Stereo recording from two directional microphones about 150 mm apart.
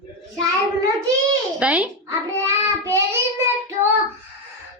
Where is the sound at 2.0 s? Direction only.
20° right (ahead or behind).